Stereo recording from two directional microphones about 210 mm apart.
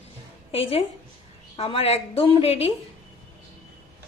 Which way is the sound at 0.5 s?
25° left (ahead or behind).